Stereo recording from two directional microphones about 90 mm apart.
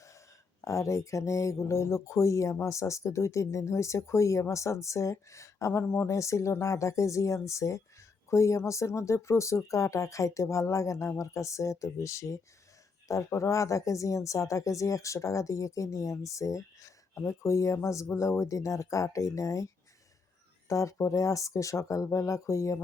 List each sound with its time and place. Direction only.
0.6 s speech: 35° left (ahead or behind)
20.7 s speech: 35° left (ahead or behind)